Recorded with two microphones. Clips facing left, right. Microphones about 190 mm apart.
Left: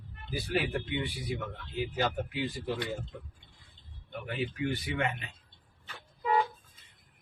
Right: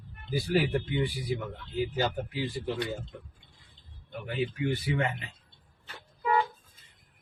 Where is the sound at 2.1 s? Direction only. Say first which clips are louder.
Right 1 dB; 30° right (ahead or behind).